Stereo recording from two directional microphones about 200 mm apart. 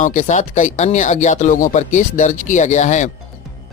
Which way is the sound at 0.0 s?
40° left (ahead or behind).